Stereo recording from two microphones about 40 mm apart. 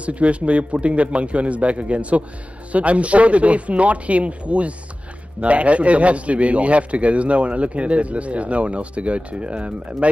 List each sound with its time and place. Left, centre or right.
0.0 s a man's voice: right